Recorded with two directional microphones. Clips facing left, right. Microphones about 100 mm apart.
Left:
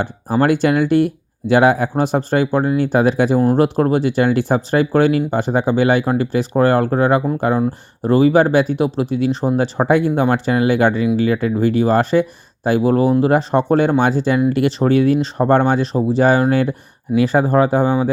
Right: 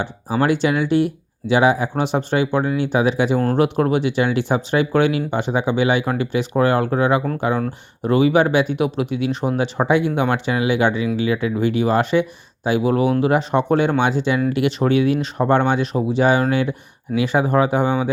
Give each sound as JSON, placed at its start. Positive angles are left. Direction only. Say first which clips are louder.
{"t": 0.0, "sound": "speech", "louder": "left 3 dB", "side_deg": 45}